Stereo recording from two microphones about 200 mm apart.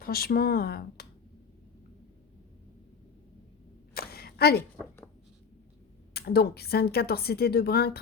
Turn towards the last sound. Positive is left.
turn(degrees=50)  # may be behind; listen again after turning